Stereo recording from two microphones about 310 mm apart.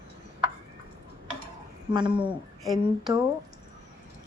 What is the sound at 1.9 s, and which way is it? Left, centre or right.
Speech, centre.